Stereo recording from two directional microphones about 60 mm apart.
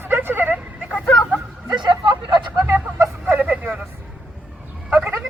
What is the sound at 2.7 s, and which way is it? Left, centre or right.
Vehicle, right.